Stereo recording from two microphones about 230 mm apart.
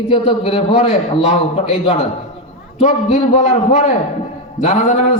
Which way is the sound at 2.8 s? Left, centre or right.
Left.